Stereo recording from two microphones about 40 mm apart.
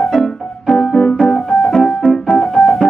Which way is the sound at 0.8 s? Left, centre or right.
Left.